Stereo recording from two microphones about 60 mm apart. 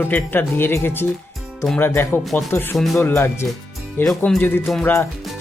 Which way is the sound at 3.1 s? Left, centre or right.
Left.